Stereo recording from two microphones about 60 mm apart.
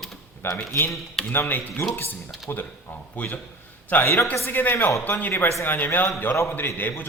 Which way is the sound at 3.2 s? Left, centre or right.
Left.